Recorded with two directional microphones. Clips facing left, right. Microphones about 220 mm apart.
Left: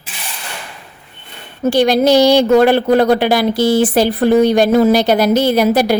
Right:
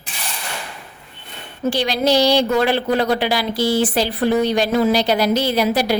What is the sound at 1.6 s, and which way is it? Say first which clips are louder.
A woman's voice: left 7 dB; 50° left (ahead or behind).